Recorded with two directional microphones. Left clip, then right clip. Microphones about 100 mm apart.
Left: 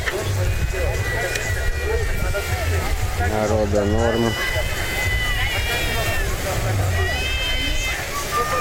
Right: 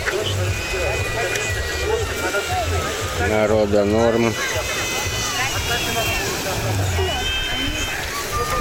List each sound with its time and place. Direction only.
3.3 s speech: 20° right (ahead or behind)
3.6 s speech: centre (ahead or behind)